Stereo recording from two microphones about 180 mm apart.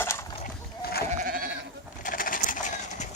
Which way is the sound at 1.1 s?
50° right (ahead or behind).